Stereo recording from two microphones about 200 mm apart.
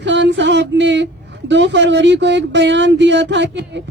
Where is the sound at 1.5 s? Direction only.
65° right (ahead or behind).